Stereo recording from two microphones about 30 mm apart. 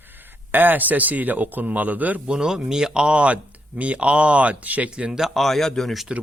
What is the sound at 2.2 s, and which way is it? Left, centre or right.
Speech, right.